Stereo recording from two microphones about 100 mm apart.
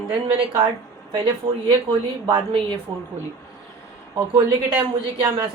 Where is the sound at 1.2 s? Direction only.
55° right (ahead or behind).